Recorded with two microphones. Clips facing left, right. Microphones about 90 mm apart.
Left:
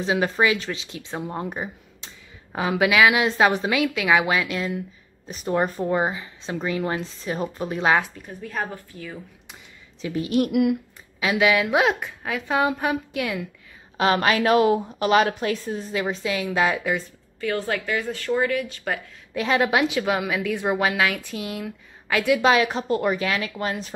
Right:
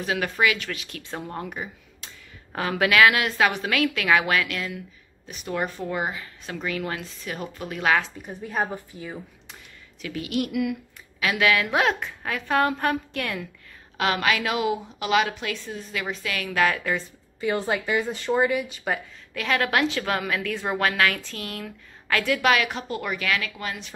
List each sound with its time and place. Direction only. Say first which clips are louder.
0.0 s a woman's voice: left 3 dB; 25° left (ahead or behind)
1.5 s a sound: left 3 dB; 30° left (ahead or behind)
2.5 s a woman's voice: left 1 dB; 10° left (ahead or behind)
3.3 s a woman's voice: left 3 dB; 30° left (ahead or behind)
3.7 s a woman's voice: left 1 dB; 15° left (ahead or behind)
5.3 s a woman's voice: left 5 dB; 35° left (ahead or behind)
8.3 s a woman's voice: right 2 dB; 20° right (ahead or behind)
10.0 s a woman's voice: left 5 dB; 30° left (ahead or behind)
10.5 s speech: left 6 dB; 50° left (ahead or behind)
11.1 s a woman's voice: left 2 dB; 15° left (ahead or behind)
13.9 s a woman's voice: left 4 dB; 30° left (ahead or behind); by 17.0 s 10° left (ahead or behind)
17.4 s speech: even; 15° right (ahead or behind)
19.3 s a woman's voice: left 3 dB; 20° left (ahead or behind)